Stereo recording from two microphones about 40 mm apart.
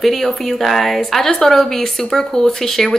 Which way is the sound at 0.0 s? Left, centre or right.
Centre.